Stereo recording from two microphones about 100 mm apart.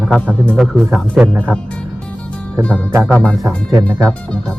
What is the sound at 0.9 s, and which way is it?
Speech, 10° right (ahead or behind).